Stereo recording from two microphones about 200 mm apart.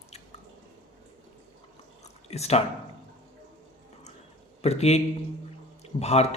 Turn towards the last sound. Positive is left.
turn(degrees=30)  # may be behind; listen again after turning